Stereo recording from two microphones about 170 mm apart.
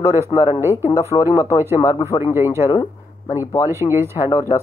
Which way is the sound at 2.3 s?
15° right (ahead or behind).